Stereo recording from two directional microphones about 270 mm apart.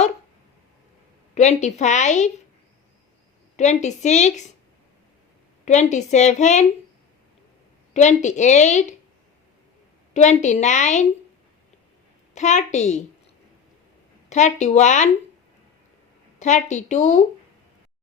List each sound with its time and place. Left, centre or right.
1.4 s a woman's voice: left
3.6 s a woman's voice: left
5.6 s a woman's voice: left
7.9 s a woman's voice: left
10.2 s a woman's voice: left
12.3 s a woman's voice: left
14.3 s a woman's voice: left
16.4 s a woman's voice: left